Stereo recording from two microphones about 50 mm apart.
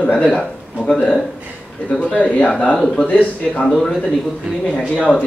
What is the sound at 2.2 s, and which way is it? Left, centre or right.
Speech, left.